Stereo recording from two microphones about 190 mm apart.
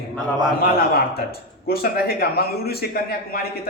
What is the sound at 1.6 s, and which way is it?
A man's voice, 55° left (ahead or behind).